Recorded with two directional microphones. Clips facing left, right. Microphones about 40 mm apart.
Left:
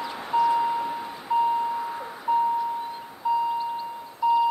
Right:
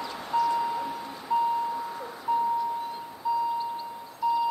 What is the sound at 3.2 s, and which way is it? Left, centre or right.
Doorbell, left.